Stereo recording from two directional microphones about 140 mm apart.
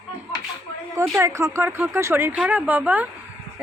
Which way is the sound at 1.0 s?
20° right (ahead or behind).